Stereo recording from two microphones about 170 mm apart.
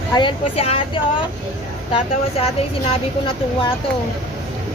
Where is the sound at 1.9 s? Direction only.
35° left (ahead or behind).